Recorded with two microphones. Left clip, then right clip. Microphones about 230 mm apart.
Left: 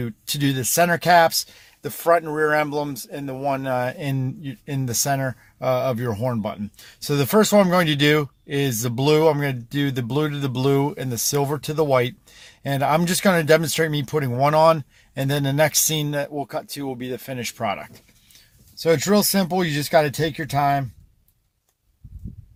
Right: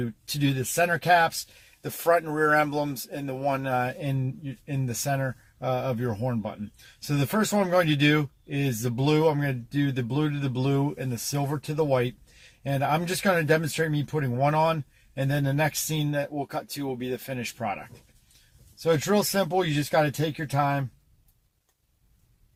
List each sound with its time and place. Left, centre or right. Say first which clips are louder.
0.3 s speech: left 5 dB; left